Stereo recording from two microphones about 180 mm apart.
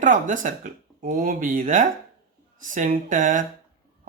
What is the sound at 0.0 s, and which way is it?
Speech, 45° right (ahead or behind).